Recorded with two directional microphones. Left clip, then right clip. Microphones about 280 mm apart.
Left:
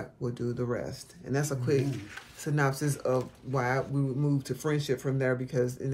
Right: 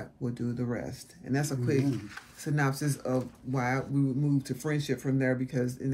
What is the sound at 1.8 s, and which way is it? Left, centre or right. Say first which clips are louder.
Speech: right 1 dB; centre.